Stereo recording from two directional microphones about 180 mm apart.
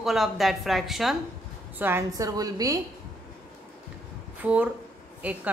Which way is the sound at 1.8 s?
15° right (ahead or behind).